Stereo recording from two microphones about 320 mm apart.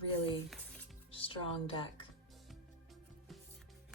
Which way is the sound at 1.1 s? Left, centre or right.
Centre.